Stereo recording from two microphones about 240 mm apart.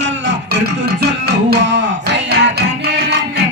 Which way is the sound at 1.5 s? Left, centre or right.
Right.